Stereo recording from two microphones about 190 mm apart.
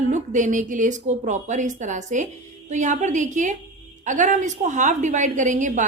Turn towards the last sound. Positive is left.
turn(degrees=-40)  # may be behind; listen again after turning